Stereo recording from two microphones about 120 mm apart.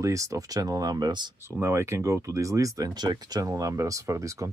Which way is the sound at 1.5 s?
20° right (ahead or behind).